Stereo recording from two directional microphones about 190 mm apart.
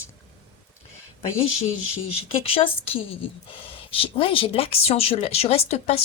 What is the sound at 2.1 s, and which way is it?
A woman's voice, 30° left (ahead or behind).